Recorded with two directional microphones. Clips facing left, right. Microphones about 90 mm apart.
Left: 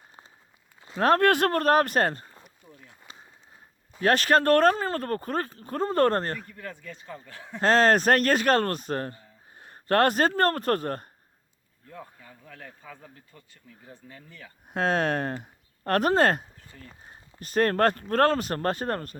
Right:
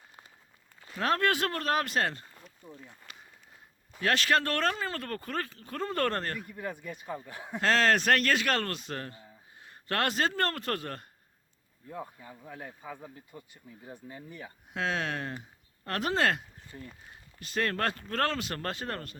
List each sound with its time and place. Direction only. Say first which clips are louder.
0.8 s a sound: left 7 dB; 20° left (ahead or behind)
1.0 s speech: left 7 dB; 50° left (ahead or behind)
2.6 s speech: right 5 dB; 20° right (ahead or behind)
4.0 s speech: left 6 dB; 40° left (ahead or behind)
6.5 s speech: right 2 dB; 15° right (ahead or behind)
7.6 s speech: left 5 dB; 40° left (ahead or behind)
11.9 s speech: right 3 dB; 20° right (ahead or behind)
14.7 s speech: left 7 dB; 45° left (ahead or behind)
16.9 s speech: left 3 dB; 30° left (ahead or behind)